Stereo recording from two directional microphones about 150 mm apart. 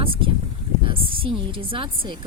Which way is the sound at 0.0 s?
35° right (ahead or behind).